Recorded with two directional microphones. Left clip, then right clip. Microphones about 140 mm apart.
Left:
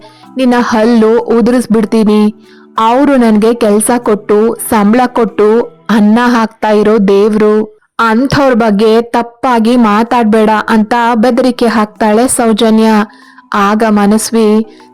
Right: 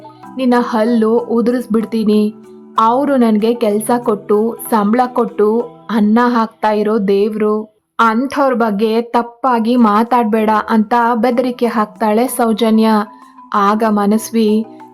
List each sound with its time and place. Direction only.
0.3 s a woman's voice: 40° left (ahead or behind)